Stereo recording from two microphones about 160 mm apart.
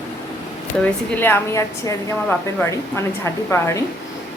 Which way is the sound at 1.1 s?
15° left (ahead or behind).